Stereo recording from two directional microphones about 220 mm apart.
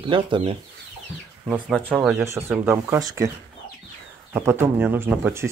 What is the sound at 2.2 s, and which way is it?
Speech, 10° right (ahead or behind).